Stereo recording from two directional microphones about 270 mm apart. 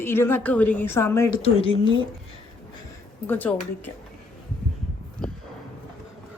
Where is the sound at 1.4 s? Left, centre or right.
Left.